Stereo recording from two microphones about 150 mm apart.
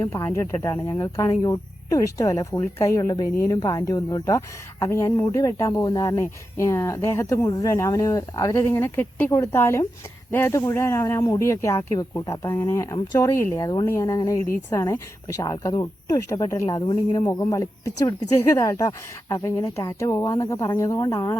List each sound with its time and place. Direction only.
0.3 s speech: 20° left (ahead or behind)
16.8 s speech: 30° left (ahead or behind)